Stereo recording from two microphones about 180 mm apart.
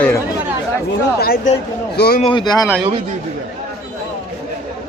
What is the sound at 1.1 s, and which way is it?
Speech, 55° left (ahead or behind).